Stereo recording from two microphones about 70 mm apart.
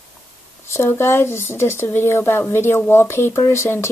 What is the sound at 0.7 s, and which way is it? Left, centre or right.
Speech, left.